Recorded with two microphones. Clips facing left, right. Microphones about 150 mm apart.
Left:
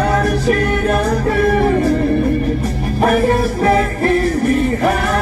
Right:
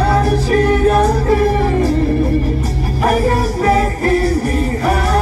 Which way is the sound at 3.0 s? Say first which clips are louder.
Left 1 dB; 35° right (ahead or behind).